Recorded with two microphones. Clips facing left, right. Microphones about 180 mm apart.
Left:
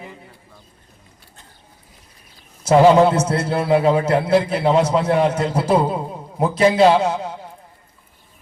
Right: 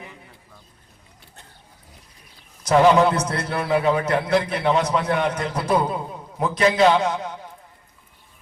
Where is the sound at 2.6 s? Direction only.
25° left (ahead or behind).